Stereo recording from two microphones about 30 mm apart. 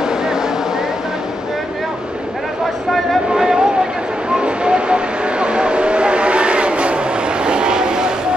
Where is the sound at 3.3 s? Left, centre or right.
Centre.